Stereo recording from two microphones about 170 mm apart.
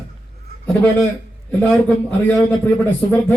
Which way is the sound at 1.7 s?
5° left (ahead or behind).